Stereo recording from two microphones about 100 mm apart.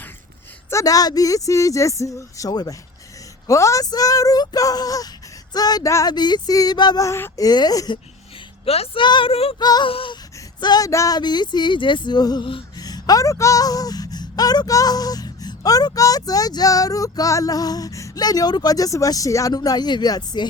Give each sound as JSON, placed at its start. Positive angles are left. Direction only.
{"t": 0.7, "sound": "speech", "side_deg": 35}
{"t": 6.1, "sound": "speech", "side_deg": 45}
{"t": 7.0, "sound": "speech", "side_deg": 30}
{"t": 8.6, "sound": "a woman's voice", "side_deg": 85}
{"t": 9.0, "sound": "speech", "side_deg": 55}
{"t": 9.6, "sound": "speech", "side_deg": 40}
{"t": 9.8, "sound": "speech", "side_deg": 60}
{"t": 10.6, "sound": "speech", "side_deg": 40}
{"t": 11.2, "sound": "speech", "side_deg": 45}